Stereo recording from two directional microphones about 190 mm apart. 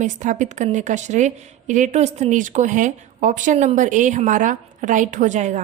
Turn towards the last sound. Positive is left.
turn(degrees=-40)  # may be behind; listen again after turning